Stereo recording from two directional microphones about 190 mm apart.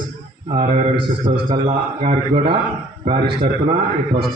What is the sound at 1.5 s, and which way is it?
A man's voice, 35° right (ahead or behind).